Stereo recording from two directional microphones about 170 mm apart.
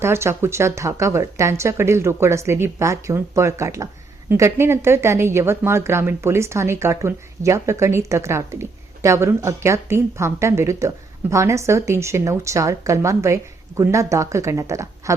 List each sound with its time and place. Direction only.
0.0 s speech: 15° right (ahead or behind)